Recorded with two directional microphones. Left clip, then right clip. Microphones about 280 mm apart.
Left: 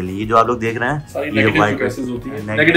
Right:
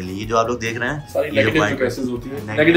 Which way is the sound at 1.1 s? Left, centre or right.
Right.